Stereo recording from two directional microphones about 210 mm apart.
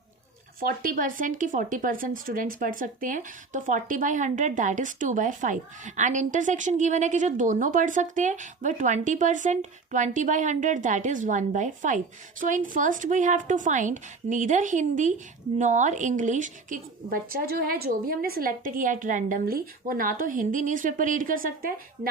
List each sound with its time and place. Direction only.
0.6 s speech: 40° right (ahead or behind)